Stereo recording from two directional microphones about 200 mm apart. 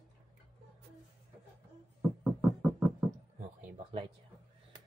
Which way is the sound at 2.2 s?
10° right (ahead or behind).